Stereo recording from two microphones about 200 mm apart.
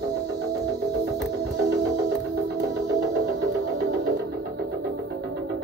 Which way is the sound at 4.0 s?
55° right (ahead or behind).